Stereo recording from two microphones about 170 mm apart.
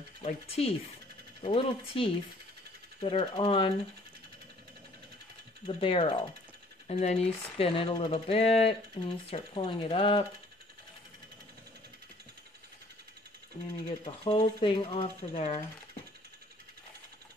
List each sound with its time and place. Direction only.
0.2 s speech: 35° left (ahead or behind)
5.7 s speech: 35° left (ahead or behind)
13.8 s speech: 30° left (ahead or behind)